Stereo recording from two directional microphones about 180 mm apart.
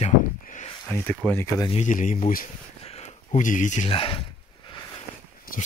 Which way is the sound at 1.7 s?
40° left (ahead or behind).